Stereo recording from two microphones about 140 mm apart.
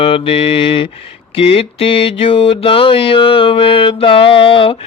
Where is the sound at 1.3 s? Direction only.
45° left (ahead or behind).